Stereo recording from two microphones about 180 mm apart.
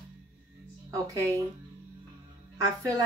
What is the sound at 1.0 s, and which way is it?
Speech, 15° right (ahead or behind).